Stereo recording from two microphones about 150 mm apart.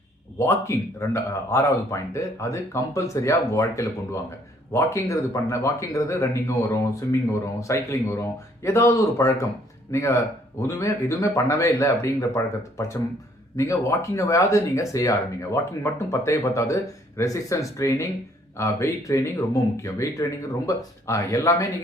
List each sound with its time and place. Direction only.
0.3 s speech: 20° left (ahead or behind)